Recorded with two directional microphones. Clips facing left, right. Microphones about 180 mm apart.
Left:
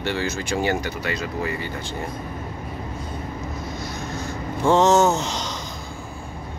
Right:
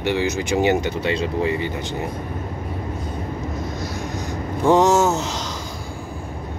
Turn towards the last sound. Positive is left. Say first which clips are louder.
# even
turn(degrees=-5)  # may be behind; listen again after turning